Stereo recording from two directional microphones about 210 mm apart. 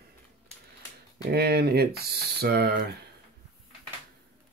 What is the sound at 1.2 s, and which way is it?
Speech, 50° right (ahead or behind).